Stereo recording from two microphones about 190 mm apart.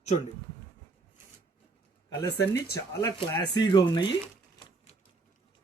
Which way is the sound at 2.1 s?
15° left (ahead or behind).